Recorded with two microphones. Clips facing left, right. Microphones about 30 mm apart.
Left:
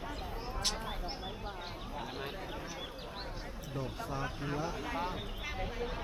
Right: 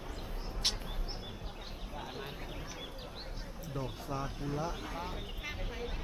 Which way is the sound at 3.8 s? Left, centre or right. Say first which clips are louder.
Left 1 dB; centre.